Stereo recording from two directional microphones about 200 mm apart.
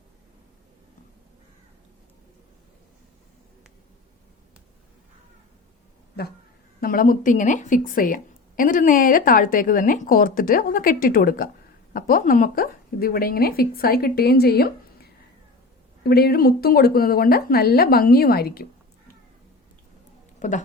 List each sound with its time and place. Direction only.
6.2 s a woman's voice: 55° left (ahead or behind)
16.0 s a woman's voice: 50° left (ahead or behind)